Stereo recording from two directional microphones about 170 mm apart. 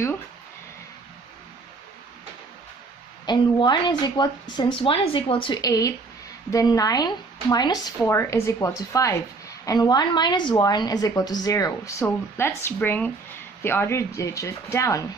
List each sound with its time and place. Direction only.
3.3 s a woman's voice: 25° left (ahead or behind)